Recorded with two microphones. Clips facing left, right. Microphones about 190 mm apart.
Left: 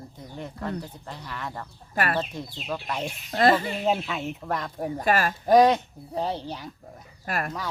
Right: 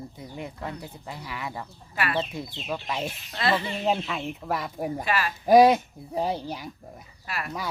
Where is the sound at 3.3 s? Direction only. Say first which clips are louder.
Left 6 dB; 45° left (ahead or behind).